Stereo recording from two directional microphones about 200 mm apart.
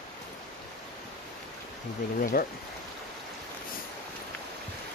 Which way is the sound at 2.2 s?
45° left (ahead or behind).